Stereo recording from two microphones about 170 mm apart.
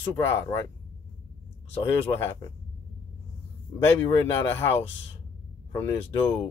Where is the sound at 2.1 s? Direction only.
20° left (ahead or behind).